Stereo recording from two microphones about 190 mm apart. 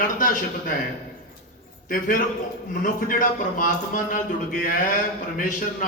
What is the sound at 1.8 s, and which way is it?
A man's voice, 45° left (ahead or behind).